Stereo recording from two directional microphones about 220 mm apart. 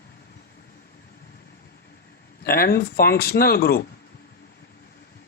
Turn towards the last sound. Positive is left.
turn(degrees=45)  # may be behind; listen again after turning